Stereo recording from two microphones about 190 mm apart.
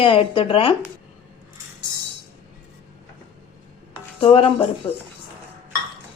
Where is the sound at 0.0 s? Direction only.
25° left (ahead or behind).